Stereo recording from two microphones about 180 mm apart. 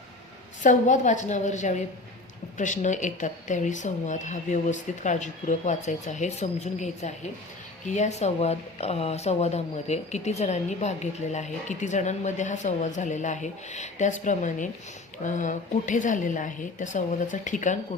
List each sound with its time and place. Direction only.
0.6 s speech: 45° left (ahead or behind)